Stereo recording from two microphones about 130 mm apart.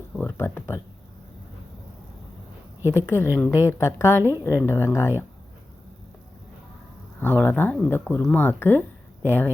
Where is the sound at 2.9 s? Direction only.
20° left (ahead or behind).